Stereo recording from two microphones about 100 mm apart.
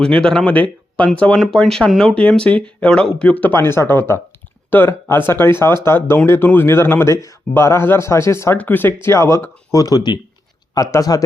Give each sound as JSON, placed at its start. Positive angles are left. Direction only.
{"t": 0.0, "sound": "speech", "side_deg": 10}